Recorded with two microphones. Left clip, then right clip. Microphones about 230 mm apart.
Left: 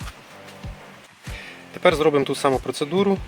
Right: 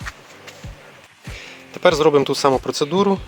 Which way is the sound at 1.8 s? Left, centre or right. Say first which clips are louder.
Right 3 dB; right.